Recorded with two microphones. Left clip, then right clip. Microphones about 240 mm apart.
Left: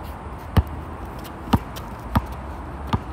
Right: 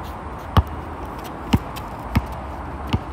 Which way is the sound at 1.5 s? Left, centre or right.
Centre.